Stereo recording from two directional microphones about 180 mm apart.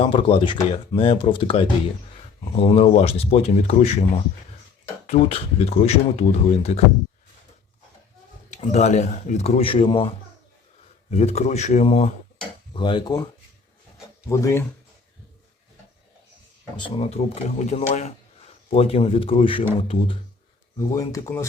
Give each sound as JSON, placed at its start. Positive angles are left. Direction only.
{"t": 0.0, "sound": "speech", "side_deg": 30}
{"t": 8.4, "sound": "speech", "side_deg": 40}
{"t": 12.7, "sound": "speech", "side_deg": 25}
{"t": 14.3, "sound": "speech", "side_deg": 15}
{"t": 16.7, "sound": "speech", "side_deg": 30}
{"t": 20.7, "sound": "speech", "side_deg": 20}